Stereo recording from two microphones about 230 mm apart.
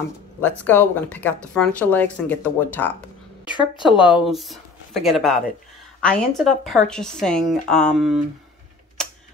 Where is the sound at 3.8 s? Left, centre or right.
Centre.